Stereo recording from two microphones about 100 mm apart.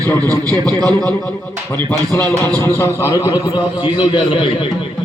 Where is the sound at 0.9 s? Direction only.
10° left (ahead or behind).